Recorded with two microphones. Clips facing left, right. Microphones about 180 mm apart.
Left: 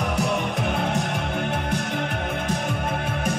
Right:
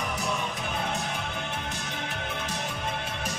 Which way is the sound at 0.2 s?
65° left (ahead or behind).